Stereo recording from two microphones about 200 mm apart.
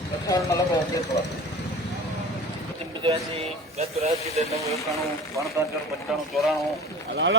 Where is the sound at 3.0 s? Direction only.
25° right (ahead or behind).